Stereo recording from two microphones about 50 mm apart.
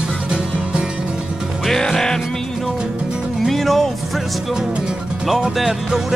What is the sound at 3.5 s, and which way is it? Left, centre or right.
Music, centre.